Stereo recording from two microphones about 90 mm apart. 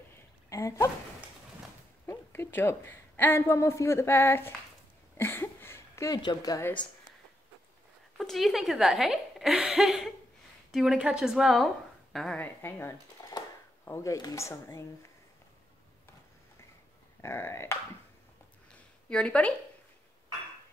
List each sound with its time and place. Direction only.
0.5 s a sound: 35° left (ahead or behind)
2.0 s a woman's voice: 25° left (ahead or behind)
5.1 s a sound: 25° left (ahead or behind)
6.0 s speech: 45° left (ahead or behind)
8.2 s a woman's voice: centre (ahead or behind)
12.4 s speech: 25° left (ahead or behind)
13.3 s a sound: 40° left (ahead or behind)
13.8 s speech: 30° left (ahead or behind)
17.2 s speech: 30° left (ahead or behind)
19.0 s speech: 10° left (ahead or behind)